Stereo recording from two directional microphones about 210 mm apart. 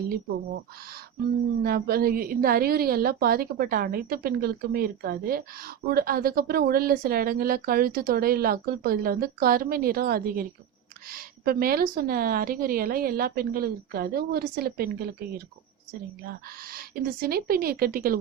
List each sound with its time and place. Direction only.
1.6 s a woman's voice: 45° right (ahead or behind)